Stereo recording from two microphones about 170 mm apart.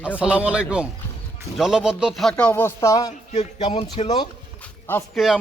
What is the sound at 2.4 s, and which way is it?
Speech, 15° left (ahead or behind).